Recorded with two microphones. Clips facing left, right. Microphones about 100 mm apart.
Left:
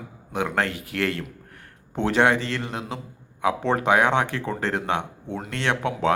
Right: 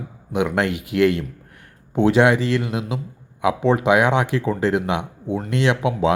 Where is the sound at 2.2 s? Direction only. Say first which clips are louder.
Right 2 dB; 15° right (ahead or behind).